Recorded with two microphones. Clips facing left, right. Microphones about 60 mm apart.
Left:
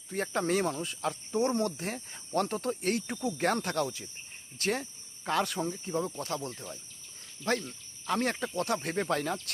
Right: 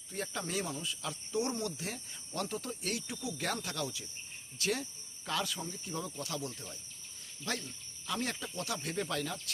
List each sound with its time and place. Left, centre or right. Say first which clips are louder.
0.1 s speech: left 8 dB; left